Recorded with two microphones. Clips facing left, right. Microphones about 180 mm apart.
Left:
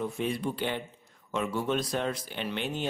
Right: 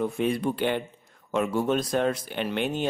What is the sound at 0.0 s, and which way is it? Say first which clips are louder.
Speech: right 5 dB; 60° right (ahead or behind).